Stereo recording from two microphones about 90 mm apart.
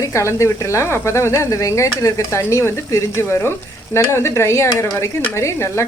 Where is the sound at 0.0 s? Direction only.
30° left (ahead or behind).